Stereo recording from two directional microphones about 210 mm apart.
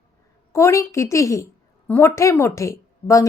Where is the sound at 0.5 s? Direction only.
15° left (ahead or behind).